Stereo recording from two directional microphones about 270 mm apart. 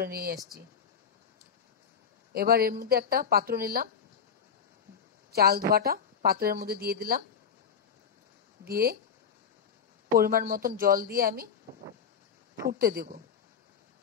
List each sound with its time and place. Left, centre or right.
0.0 s speech: right
2.3 s speech: right
5.3 s speech: right
8.6 s speech: right
10.0 s a woman's voice: right
12.7 s speech: right